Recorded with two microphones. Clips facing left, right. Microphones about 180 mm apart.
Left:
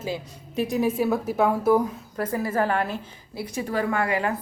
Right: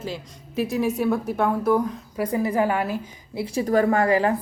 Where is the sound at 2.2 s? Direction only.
15° right (ahead or behind).